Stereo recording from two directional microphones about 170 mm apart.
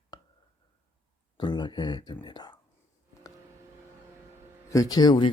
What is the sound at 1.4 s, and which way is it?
Speech, 25° left (ahead or behind).